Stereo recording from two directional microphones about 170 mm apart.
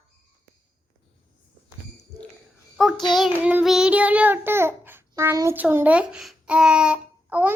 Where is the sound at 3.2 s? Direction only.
5° right (ahead or behind).